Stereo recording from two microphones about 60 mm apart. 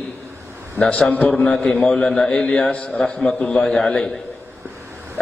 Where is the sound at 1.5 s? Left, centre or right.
Centre.